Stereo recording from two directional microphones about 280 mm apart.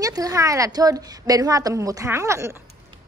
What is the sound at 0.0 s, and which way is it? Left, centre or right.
A woman's voice, centre.